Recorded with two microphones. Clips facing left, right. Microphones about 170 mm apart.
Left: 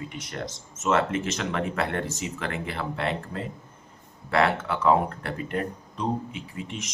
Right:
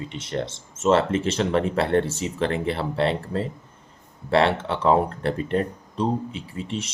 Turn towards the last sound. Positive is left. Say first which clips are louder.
# right 5 dB
turn(degrees=-30)  # may be behind; listen again after turning